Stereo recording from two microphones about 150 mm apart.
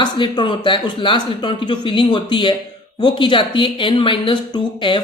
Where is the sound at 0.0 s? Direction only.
30° left (ahead or behind).